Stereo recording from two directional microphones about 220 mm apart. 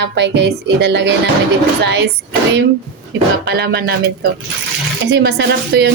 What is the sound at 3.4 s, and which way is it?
A woman's voice, 45° right (ahead or behind).